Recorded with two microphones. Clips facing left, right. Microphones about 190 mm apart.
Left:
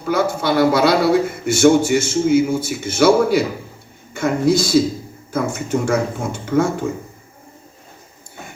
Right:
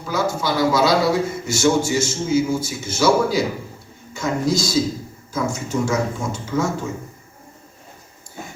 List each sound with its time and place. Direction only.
0.1 s a man's voice: 60° left (ahead or behind)